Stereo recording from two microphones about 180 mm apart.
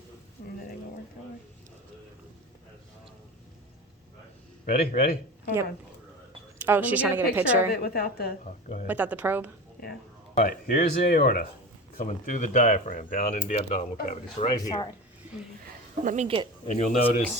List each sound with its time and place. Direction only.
4.6 s speech: 45° left (ahead or behind)
6.6 s a woman's voice: 10° right (ahead or behind)
7.7 s a woman's voice: 60° left (ahead or behind)
8.9 s a woman's voice: 10° right (ahead or behind)
9.8 s speech: 55° left (ahead or behind); by 14.4 s 35° left (ahead or behind)
14.5 s speech: 20° left (ahead or behind)
15.6 s a sound: 45° right (ahead or behind)
16.6 s speech: 40° left (ahead or behind)